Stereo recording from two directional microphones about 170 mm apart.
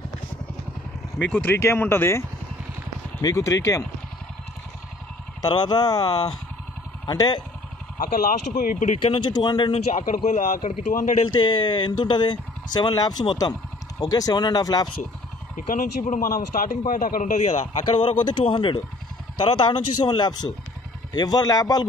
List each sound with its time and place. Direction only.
1.3 s speech: 10° left (ahead or behind)
5.4 s speech: 25° left (ahead or behind)
8.0 s speech: 55° left (ahead or behind)
9.2 s speech: 25° left (ahead or behind)
9.9 s speech: 45° left (ahead or behind)
11.4 s speech: 25° left (ahead or behind)
15.5 s speech: 50° left (ahead or behind); by 21.8 s 20° left (ahead or behind)